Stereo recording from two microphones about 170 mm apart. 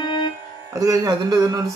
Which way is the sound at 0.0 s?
25° left (ahead or behind).